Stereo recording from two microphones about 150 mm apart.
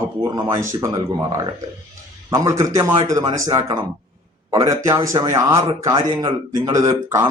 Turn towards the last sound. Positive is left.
turn(degrees=-20)  # may be behind; listen again after turning